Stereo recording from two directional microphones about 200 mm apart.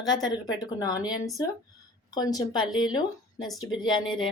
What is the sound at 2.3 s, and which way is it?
A woman's voice, 20° left (ahead or behind).